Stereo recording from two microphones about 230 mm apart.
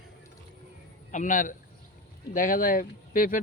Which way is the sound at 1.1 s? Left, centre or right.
Left.